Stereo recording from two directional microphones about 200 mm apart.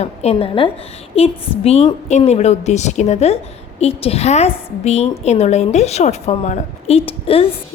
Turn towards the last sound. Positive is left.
turn(degrees=30)  # may be behind; listen again after turning